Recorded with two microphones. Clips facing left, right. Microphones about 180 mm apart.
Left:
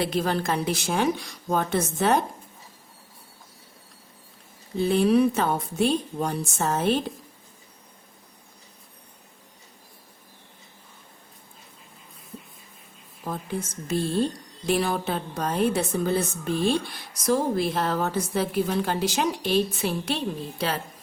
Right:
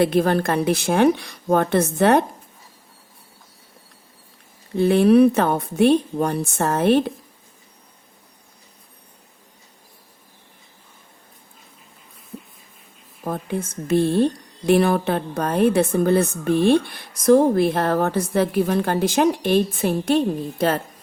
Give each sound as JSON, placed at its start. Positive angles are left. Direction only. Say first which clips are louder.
{"t": 0.0, "sound": "a woman's voice", "louder": "right 7 dB", "side_deg": -55}
{"t": 4.7, "sound": "a woman's voice", "louder": "right 6 dB", "side_deg": -60}
{"t": 13.2, "sound": "a woman's voice", "louder": "right 5 dB", "side_deg": -55}